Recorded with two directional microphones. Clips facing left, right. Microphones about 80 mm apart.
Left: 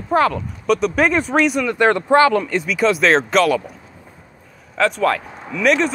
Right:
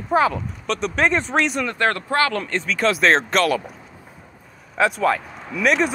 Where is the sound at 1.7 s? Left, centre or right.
Centre.